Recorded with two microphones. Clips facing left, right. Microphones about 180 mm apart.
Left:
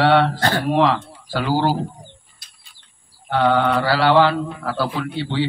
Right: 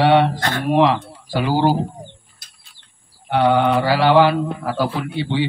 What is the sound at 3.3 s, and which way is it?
A man's voice, 15° right (ahead or behind).